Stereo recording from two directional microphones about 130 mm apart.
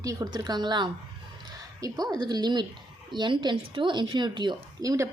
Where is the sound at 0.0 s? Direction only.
25° right (ahead or behind).